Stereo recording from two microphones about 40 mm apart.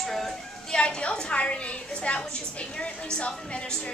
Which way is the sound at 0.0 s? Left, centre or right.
Centre.